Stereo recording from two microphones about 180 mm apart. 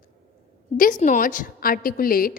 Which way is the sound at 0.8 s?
45° left (ahead or behind).